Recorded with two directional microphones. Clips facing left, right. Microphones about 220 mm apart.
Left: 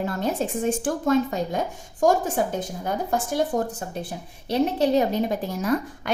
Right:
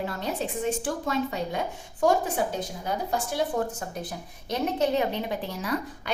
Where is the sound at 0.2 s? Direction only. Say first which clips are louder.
Left 5 dB; 50° left (ahead or behind).